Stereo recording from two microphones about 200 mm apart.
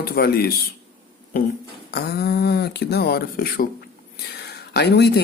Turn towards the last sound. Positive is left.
turn(degrees=55)  # may be behind; listen again after turning